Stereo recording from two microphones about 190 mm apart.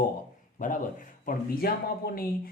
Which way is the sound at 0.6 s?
45° left (ahead or behind).